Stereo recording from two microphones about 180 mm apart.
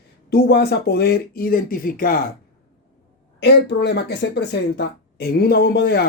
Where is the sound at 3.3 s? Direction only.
70° left (ahead or behind).